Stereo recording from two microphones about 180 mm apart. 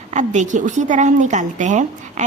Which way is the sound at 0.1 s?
40° right (ahead or behind).